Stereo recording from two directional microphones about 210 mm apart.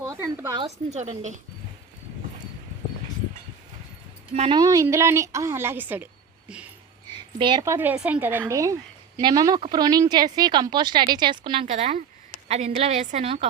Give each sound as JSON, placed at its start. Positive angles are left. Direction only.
{"t": 0.5, "sound": "a woman's voice", "side_deg": -30}
{"t": 4.4, "sound": "speech", "side_deg": -25}
{"t": 4.6, "sound": "speech", "side_deg": -15}
{"t": 7.3, "sound": "speech", "side_deg": -20}
{"t": 11.6, "sound": "a woman's voice", "side_deg": -35}